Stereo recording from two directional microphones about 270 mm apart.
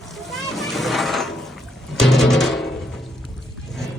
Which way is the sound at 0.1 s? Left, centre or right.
Centre.